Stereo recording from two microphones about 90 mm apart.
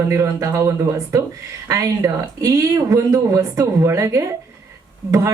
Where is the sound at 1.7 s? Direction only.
40° right (ahead or behind).